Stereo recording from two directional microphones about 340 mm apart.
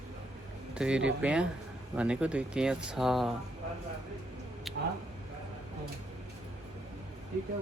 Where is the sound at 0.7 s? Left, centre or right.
Centre.